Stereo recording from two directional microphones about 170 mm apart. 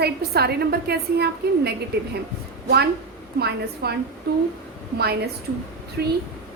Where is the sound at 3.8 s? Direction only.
70° right (ahead or behind).